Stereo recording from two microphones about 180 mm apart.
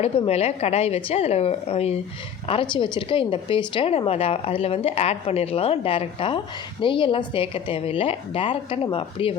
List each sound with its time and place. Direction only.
0.0 s speech: 35° left (ahead or behind)